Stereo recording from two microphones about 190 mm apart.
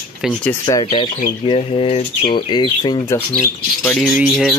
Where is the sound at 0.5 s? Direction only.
20° left (ahead or behind).